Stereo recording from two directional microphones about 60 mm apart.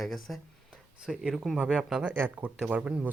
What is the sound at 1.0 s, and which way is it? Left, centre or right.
Speech, centre.